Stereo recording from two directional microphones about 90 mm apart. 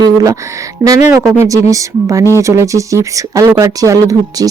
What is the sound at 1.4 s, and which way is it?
Speech, 35° right (ahead or behind).